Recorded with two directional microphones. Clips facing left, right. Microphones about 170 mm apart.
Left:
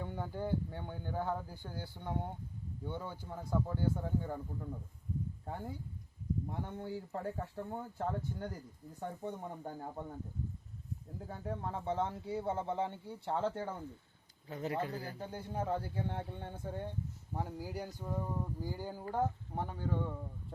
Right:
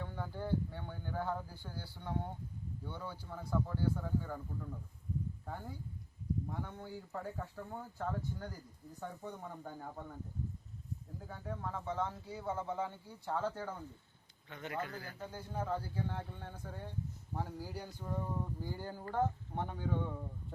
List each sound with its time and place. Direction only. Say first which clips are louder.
0.0 s speech: left 3 dB; 15° left (ahead or behind)
5.5 s speech: left 3 dB; 25° left (ahead or behind)
11.3 s speech: left 2 dB; 30° left (ahead or behind); by 20.1 s centre (ahead or behind)